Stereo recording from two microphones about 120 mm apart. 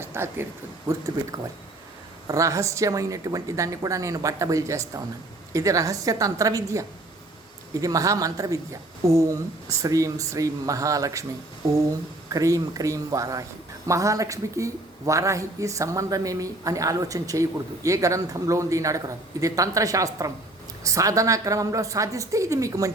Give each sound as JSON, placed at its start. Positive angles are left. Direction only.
{"t": 0.0, "sound": "speech", "side_deg": -20}
{"t": 0.9, "sound": "speech", "side_deg": -30}
{"t": 12.3, "sound": "speech", "side_deg": -30}